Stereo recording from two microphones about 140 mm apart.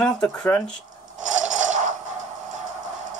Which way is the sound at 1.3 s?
60° right (ahead or behind).